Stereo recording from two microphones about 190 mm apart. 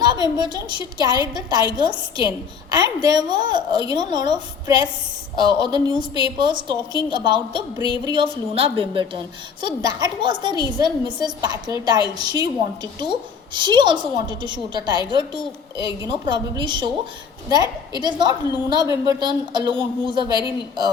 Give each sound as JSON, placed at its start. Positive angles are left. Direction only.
{"t": 0.0, "sound": "a woman's voice", "side_deg": -20}